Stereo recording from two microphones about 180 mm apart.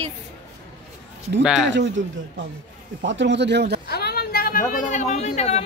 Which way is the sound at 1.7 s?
90° right.